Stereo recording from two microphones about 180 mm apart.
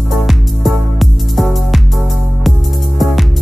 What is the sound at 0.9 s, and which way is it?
Music, centre (ahead or behind).